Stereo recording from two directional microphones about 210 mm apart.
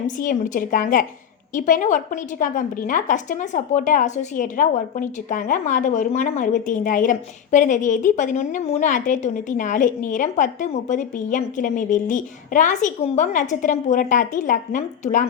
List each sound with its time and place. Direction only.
0.2 s a woman's voice: 40° left (ahead or behind)